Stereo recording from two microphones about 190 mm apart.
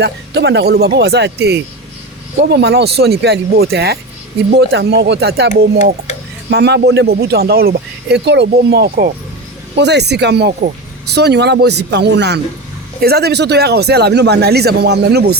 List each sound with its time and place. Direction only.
0.0 s speech: 65° right (ahead or behind)